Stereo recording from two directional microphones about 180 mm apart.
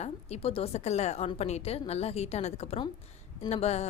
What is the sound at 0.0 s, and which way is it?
A woman's voice, 35° left (ahead or behind).